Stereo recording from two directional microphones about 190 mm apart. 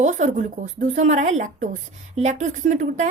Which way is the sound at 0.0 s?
40° right (ahead or behind).